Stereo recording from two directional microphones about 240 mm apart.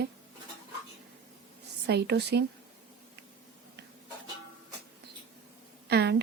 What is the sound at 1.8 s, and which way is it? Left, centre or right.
Speech, right.